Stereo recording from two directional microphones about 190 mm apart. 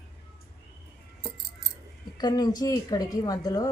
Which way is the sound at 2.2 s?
20° left (ahead or behind).